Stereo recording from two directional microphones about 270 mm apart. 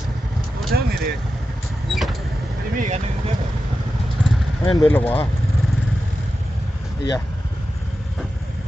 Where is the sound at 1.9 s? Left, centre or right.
Centre.